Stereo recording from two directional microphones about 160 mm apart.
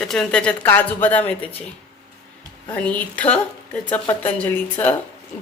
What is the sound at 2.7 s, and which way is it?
Speech, 10° left (ahead or behind).